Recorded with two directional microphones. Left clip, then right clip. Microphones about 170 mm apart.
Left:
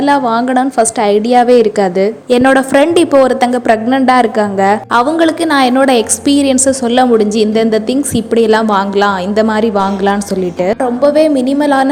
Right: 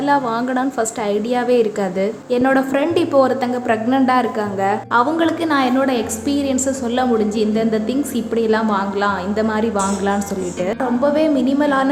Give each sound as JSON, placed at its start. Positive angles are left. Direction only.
{"t": 0.0, "sound": "a woman's voice", "side_deg": 40}